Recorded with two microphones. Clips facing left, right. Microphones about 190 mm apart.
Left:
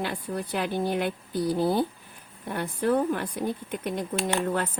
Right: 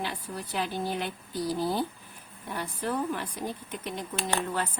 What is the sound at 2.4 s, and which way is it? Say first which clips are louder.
Speech: left 7 dB; 55° left (ahead or behind).